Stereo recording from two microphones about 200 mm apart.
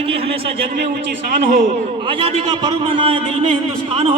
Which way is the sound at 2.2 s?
25° right (ahead or behind).